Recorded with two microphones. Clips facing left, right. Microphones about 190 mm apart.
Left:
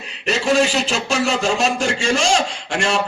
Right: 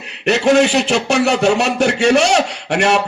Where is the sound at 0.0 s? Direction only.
65° right (ahead or behind).